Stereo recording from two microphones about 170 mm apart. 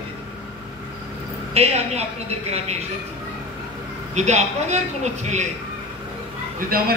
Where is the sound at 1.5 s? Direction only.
35° right (ahead or behind).